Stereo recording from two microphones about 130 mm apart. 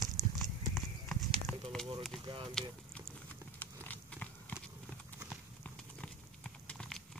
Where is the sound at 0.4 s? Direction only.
Centre (ahead or behind).